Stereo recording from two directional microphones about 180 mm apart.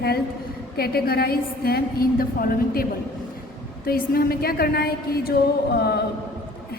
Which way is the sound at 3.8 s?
55° left (ahead or behind).